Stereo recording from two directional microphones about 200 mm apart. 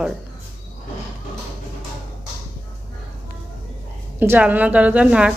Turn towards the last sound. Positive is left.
turn(degrees=-5)  # may be behind; listen again after turning